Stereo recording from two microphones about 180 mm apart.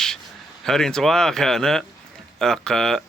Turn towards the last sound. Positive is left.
turn(degrees=5)  # may be behind; listen again after turning